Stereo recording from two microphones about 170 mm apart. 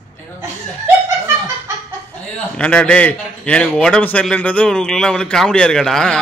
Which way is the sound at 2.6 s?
5° left (ahead or behind).